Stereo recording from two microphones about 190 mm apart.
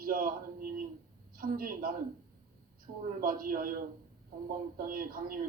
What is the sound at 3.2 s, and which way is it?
Speech, 50° right (ahead or behind).